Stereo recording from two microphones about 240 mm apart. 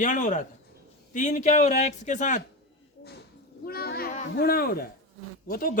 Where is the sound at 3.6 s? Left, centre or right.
Left.